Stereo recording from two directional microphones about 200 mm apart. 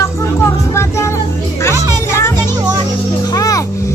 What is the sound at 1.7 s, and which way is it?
Speech, 15° right (ahead or behind).